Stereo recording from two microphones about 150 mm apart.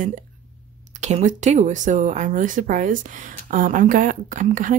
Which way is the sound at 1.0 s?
50° right (ahead or behind).